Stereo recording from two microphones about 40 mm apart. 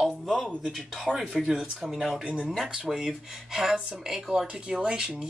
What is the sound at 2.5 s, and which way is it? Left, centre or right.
Speech, centre.